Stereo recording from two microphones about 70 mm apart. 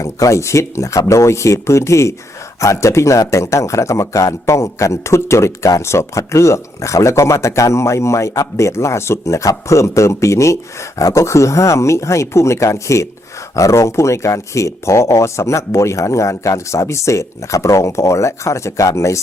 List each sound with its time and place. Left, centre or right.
0.0 s speech: left